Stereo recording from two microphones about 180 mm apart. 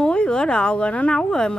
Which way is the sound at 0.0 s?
5° left (ahead or behind).